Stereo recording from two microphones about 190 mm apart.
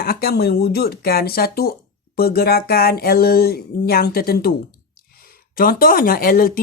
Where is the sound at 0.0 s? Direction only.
55° left (ahead or behind).